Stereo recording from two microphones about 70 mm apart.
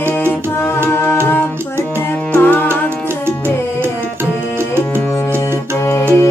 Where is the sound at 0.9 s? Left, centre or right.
Left.